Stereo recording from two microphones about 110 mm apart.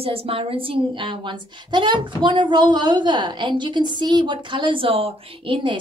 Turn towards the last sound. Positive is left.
turn(degrees=-50)  # may be behind; listen again after turning